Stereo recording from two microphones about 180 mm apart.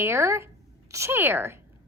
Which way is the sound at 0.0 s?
15° right (ahead or behind).